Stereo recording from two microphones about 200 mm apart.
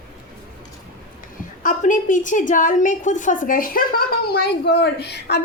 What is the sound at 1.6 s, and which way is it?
A woman's voice, 40° left (ahead or behind).